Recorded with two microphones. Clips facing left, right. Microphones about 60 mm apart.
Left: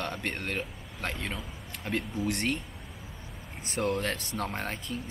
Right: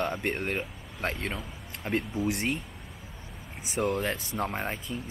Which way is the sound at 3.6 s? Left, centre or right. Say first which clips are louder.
Right 1 dB; centre.